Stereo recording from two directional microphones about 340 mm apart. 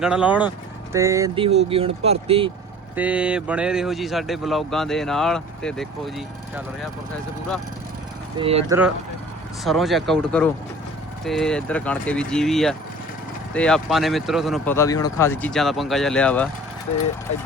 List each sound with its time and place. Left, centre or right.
0.0 s speech: centre
2.9 s speech: centre
8.4 s speech: centre
9.6 s speech: centre